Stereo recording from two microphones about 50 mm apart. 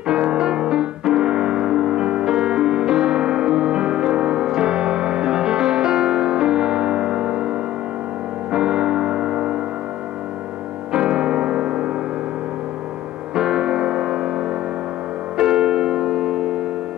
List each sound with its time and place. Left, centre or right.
0.1 s music: centre
8.5 s music: centre
10.9 s music: centre
13.3 s music: centre
15.3 s music: centre